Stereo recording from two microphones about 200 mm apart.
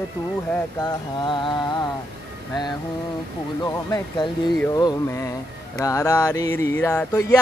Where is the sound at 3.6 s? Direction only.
20° left (ahead or behind).